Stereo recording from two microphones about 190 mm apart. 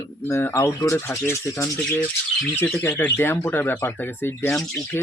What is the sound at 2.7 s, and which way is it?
Speech, 10° left (ahead or behind).